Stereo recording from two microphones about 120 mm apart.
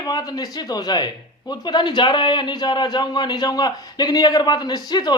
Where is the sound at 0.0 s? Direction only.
35° left (ahead or behind).